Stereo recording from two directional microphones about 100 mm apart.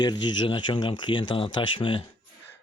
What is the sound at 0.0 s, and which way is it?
Speech, 50° left (ahead or behind).